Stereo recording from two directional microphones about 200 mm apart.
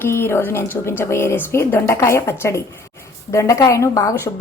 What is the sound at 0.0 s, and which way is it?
A woman's voice, 10° left (ahead or behind).